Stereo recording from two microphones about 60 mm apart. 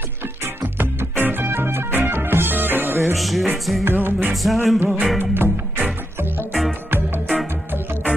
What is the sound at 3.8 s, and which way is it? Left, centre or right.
Music, right.